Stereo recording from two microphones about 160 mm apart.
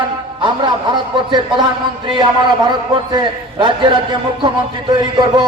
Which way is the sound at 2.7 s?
30° right (ahead or behind).